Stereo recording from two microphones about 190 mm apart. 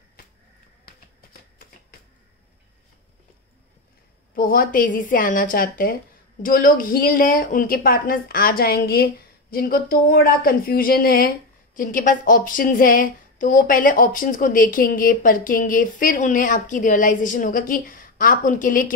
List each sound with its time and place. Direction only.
4.4 s a woman's voice: 50° left (ahead or behind)